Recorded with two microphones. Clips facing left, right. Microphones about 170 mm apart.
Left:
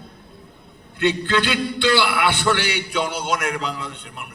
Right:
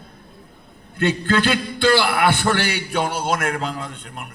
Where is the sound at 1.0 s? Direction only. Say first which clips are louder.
Right 1 dB; 50° right (ahead or behind).